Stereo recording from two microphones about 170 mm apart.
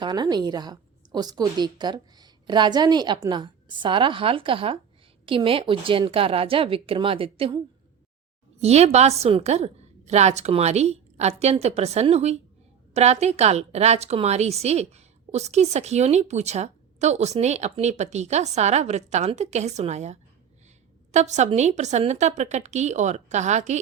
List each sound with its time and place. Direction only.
0.0 s a woman's voice: 25° right (ahead or behind)
8.6 s speech: 40° right (ahead or behind)